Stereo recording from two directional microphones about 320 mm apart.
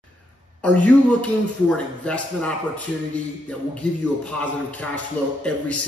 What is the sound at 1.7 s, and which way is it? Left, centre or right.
Speech, centre.